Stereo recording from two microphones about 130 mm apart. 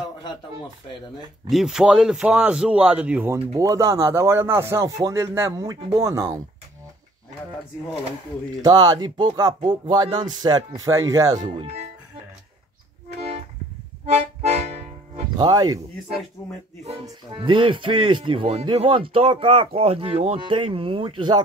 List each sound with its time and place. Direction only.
1.5 s a man's voice: 5° right (ahead or behind)
3.5 s speech: 25° right (ahead or behind)
8.6 s speech: 30° right (ahead or behind)
14.0 s accordion: 55° right (ahead or behind)
15.3 s speech: 35° right (ahead or behind)
17.4 s speech: 40° right (ahead or behind)